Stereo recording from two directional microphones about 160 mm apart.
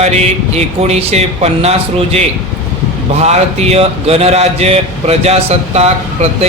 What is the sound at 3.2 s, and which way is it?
Speech, 40° right (ahead or behind).